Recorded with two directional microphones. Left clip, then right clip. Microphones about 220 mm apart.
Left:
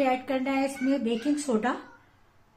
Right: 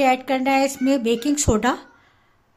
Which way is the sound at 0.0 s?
45° right (ahead or behind).